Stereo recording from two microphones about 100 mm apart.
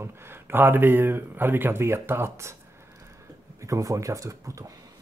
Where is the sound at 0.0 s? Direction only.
25° right (ahead or behind).